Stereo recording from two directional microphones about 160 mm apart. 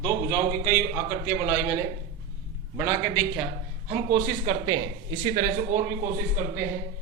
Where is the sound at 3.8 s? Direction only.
45° right (ahead or behind).